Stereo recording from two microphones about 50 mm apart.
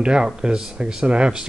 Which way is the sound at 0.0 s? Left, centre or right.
Centre.